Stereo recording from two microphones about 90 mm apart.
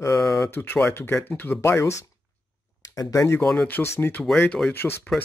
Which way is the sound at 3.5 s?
20° left (ahead or behind).